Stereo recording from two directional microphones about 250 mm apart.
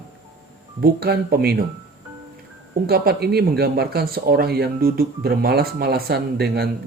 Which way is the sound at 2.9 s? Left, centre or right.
Right.